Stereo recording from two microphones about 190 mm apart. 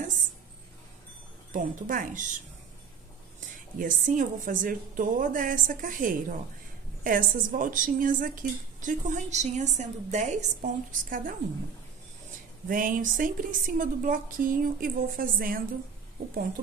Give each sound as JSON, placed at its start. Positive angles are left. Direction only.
{"t": 1.5, "sound": "speech", "side_deg": -45}
{"t": 3.3, "sound": "speech", "side_deg": -45}
{"t": 12.6, "sound": "speech", "side_deg": -45}